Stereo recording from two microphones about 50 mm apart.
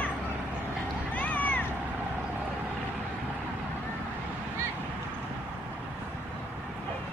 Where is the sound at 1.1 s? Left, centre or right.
Left.